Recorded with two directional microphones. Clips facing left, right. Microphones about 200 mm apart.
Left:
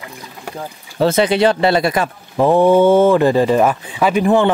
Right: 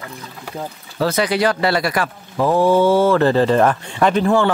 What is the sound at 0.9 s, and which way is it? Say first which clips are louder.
Speech: left 4 dB; 25° left (ahead or behind).